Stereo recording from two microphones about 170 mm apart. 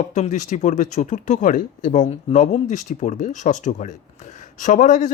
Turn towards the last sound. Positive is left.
turn(degrees=45)  # may be behind; listen again after turning